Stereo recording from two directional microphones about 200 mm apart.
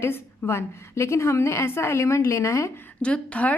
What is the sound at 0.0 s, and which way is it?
A woman's voice, 10° left (ahead or behind).